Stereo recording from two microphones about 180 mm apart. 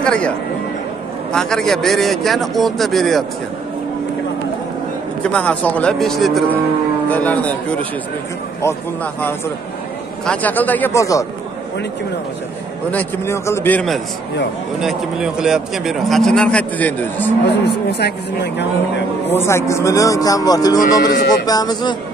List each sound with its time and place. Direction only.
0.0 s speech: 5° left (ahead or behind)
1.3 s a man's voice: 5° left (ahead or behind)
5.2 s speech: 5° left (ahead or behind)
12.9 s a man's voice: 15° left (ahead or behind)
17.5 s speech: 65° left (ahead or behind)
19.3 s speech: 15° left (ahead or behind)